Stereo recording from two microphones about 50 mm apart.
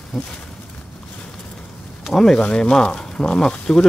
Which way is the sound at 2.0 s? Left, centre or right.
Centre.